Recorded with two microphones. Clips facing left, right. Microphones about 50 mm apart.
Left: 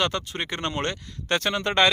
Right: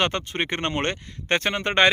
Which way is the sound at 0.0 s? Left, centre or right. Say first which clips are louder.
Right 2 dB; right.